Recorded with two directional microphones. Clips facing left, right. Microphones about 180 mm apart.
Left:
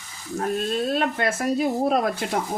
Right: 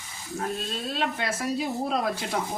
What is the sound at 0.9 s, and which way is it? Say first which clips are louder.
Speech: left 5 dB; 50° left (ahead or behind).